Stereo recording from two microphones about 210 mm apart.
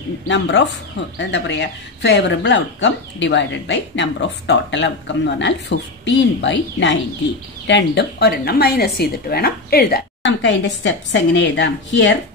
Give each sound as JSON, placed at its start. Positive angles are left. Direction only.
{"t": 0.3, "sound": "a woman's voice", "side_deg": 55}